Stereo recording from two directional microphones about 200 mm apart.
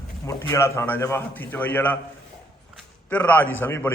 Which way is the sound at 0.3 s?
15° left (ahead or behind).